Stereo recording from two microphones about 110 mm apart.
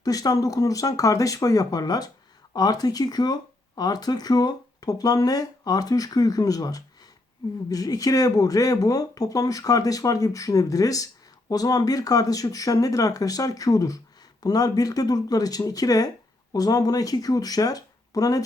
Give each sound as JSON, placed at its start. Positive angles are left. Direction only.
{"t": 0.0, "sound": "speech", "side_deg": 35}